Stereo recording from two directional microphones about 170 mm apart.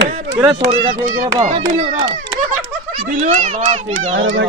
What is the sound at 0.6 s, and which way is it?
A child's voice, 55° right (ahead or behind).